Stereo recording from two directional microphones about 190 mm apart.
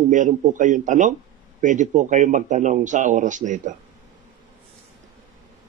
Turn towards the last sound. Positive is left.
turn(degrees=-40)  # may be behind; listen again after turning